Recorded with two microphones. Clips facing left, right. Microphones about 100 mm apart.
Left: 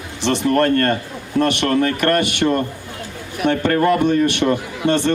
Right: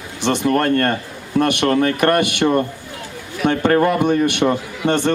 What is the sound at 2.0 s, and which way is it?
Speech, 15° right (ahead or behind).